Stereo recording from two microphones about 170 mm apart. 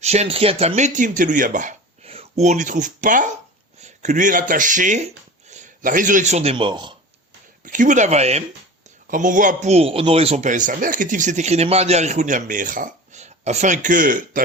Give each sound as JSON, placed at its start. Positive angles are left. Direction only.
{"t": 0.0, "sound": "a man's voice", "side_deg": -40}
{"t": 2.0, "sound": "speech", "side_deg": -35}
{"t": 7.6, "sound": "a man's voice", "side_deg": -50}
{"t": 9.0, "sound": "a man's voice", "side_deg": -50}